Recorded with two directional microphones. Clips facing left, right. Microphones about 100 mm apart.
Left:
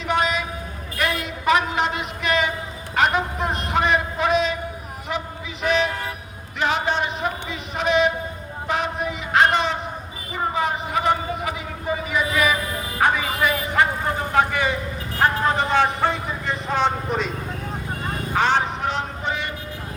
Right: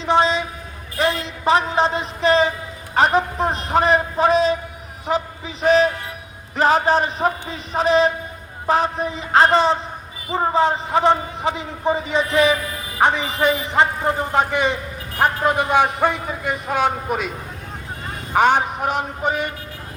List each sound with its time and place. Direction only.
0.0 s a sound: 30° right (ahead or behind)
0.9 s a woman's voice: 30° right (ahead or behind)
2.9 s a sound: 35° right (ahead or behind)
10.3 s a man's voice: 30° right (ahead or behind); by 17.3 s 10° right (ahead or behind)
18.3 s speech: 15° right (ahead or behind)
19.2 s music: 50° right (ahead or behind)